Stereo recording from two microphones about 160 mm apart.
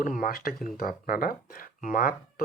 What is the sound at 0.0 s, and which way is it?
Speech, 60° left (ahead or behind).